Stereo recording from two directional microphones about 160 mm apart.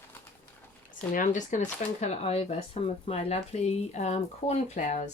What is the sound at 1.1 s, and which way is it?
Speech, 55° left (ahead or behind).